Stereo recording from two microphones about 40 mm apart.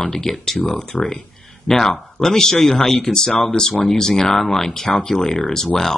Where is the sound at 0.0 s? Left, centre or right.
Centre.